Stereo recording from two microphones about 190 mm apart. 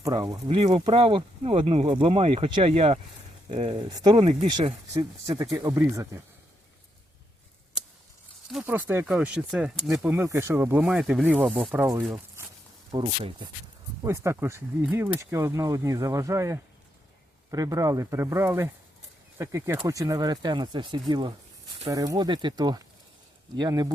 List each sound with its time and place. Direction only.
0.0 s speech: 20° right (ahead or behind)
0.4 s speech: 30° right (ahead or behind); by 6.1 s 15° right (ahead or behind)
8.5 s speech: 10° right (ahead or behind)
10.1 s speech: 15° right (ahead or behind)
12.9 s speech: 25° right (ahead or behind)
14.0 s speech: 15° right (ahead or behind)